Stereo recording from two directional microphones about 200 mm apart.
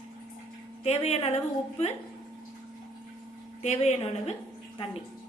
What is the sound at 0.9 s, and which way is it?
Speech, 30° left (ahead or behind).